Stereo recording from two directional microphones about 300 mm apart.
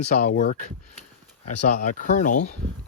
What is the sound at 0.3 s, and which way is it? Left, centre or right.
Speech, left.